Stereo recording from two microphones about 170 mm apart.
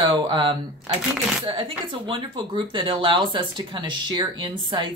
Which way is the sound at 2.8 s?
30° right (ahead or behind).